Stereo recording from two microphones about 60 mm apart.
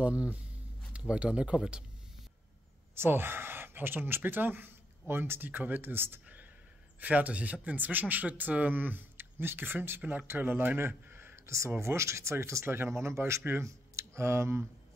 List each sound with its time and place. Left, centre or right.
0.0 s speech: right
3.0 s speech: right
7.0 s speech: right
10.8 s a sound: right
11.7 s speech: right
12.6 s speech: right